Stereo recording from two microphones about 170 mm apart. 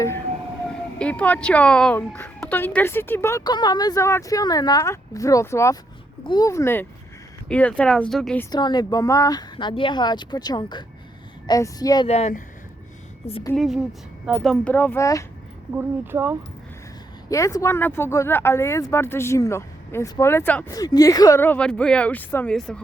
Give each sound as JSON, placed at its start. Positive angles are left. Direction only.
{"t": 0.7, "sound": "speech", "side_deg": 5}
{"t": 8.4, "sound": "speech", "side_deg": 25}
{"t": 12.0, "sound": "speech", "side_deg": 40}
{"t": 13.6, "sound": "a woman's voice", "side_deg": 0}
{"t": 15.7, "sound": "speech", "side_deg": -10}
{"t": 17.2, "sound": "speech", "side_deg": 20}
{"t": 20.7, "sound": "a woman's voice", "side_deg": 20}